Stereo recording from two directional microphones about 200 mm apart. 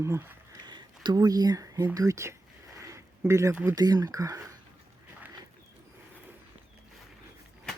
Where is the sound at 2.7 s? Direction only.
15° right (ahead or behind).